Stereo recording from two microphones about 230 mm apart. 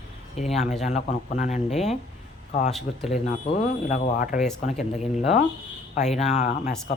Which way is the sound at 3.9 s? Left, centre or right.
Left.